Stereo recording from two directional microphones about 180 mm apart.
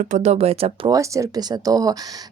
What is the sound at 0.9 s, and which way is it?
Speech, 15° right (ahead or behind).